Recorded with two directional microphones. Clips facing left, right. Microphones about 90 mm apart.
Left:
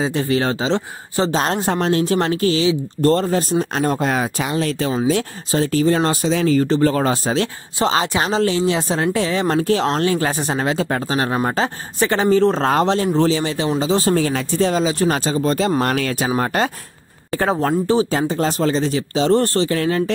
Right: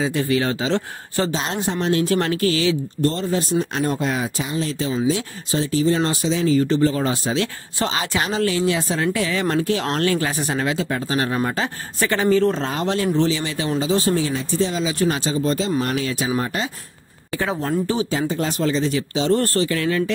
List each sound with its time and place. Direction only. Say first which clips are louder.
0.0 s speech: left 2 dB; 30° left (ahead or behind)
0.7 s speech: left 2 dB; 20° left (ahead or behind)
1.3 s speech: left 5 dB; 45° left (ahead or behind); by 2.7 s 30° left (ahead or behind)
3.0 s speech: left 8 dB; 45° left (ahead or behind); by 7.1 s 60° left (ahead or behind)
7.1 s speech: left 3 dB; 45° left (ahead or behind)
7.8 s speech: left 5 dB; 30° left (ahead or behind)
9.6 s speech: left 4 dB; 40° left (ahead or behind)
9.8 s speech: left 3 dB; 25° left (ahead or behind); by 11.1 s 45° left (ahead or behind)
11.1 s speech: left 2 dB; 30° left (ahead or behind)
14.3 s speech: left 3 dB; 65° left (ahead or behind)
14.7 s speech: left 4 dB; 40° left (ahead or behind)
15.8 s speech: left 3 dB; 70° left (ahead or behind)
17.3 s speech: left 5 dB; 40° left (ahead or behind)